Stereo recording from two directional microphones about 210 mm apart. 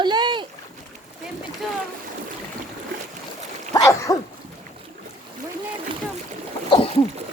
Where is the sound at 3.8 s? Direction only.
15° left (ahead or behind).